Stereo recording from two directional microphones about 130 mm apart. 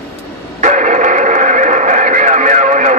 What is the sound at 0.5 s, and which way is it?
Radio, 70° right (ahead or behind).